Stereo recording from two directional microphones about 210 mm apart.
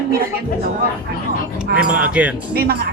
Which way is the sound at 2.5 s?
45° right (ahead or behind).